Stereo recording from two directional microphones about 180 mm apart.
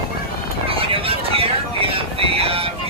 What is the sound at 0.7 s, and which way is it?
Music, 30° right (ahead or behind).